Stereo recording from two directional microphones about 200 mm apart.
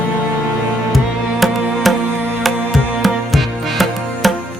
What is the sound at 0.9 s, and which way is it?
Music, centre (ahead or behind).